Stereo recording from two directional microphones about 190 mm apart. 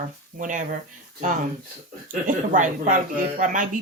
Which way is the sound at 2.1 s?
45° right (ahead or behind).